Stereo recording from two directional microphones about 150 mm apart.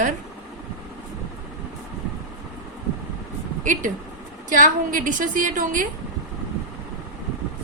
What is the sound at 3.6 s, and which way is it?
A woman's voice, 60° right (ahead or behind).